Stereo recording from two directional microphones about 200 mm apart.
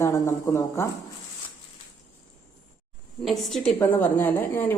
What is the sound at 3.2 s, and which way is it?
A woman's voice, centre (ahead or behind).